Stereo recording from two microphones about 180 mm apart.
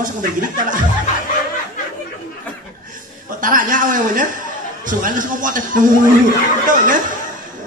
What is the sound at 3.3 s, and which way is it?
A woman's voice, 50° right (ahead or behind).